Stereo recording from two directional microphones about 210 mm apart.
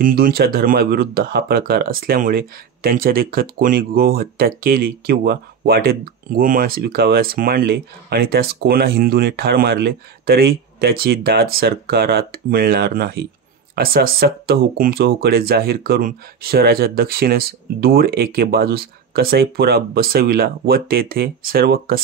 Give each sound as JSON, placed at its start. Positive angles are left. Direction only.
{"t": 0.0, "sound": "speech", "side_deg": -45}